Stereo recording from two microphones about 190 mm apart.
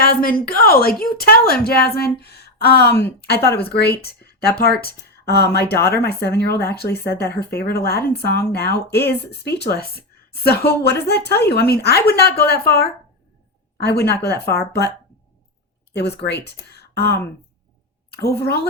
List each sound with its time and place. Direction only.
0.0 s a woman's voice: 50° left (ahead or behind)
15.9 s speech: 60° left (ahead or behind)